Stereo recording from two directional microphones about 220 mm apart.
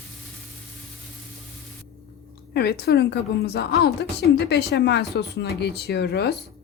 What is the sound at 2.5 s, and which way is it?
Speech, 45° left (ahead or behind).